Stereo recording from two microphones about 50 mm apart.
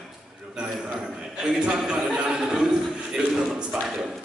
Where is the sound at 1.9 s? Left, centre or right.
Centre.